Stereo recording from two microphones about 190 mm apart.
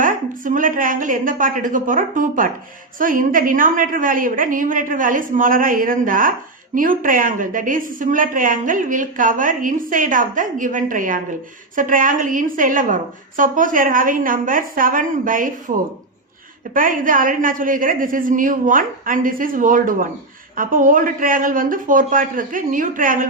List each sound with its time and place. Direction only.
0.0 s a woman's voice: 45° right (ahead or behind)
16.7 s a woman's voice: 45° right (ahead or behind)